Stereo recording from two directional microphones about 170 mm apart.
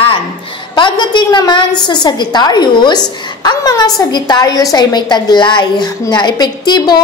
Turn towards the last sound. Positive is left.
turn(degrees=25)  # may be behind; listen again after turning